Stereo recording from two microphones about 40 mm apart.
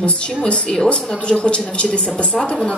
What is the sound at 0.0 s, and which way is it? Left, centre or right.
A woman's voice, left.